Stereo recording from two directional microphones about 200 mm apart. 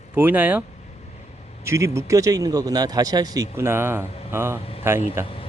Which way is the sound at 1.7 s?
15° right (ahead or behind).